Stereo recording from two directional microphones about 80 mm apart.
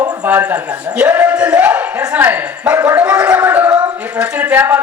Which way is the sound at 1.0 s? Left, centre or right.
Right.